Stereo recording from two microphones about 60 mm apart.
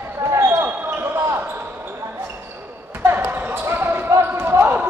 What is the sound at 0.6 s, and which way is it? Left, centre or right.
Basketball bounce, right.